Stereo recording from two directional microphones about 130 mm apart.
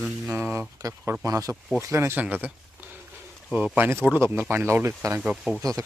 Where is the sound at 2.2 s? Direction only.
15° right (ahead or behind).